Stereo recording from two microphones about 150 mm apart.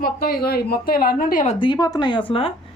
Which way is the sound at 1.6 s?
30° left (ahead or behind).